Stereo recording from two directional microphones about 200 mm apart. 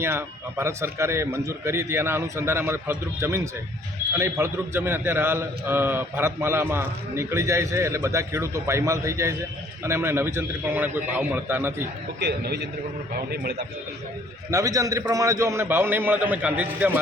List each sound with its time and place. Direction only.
0.0 s a man's voice: 10° right (ahead or behind)
12.2 s a man's voice: 55° right (ahead or behind)
14.5 s a man's voice: 15° right (ahead or behind)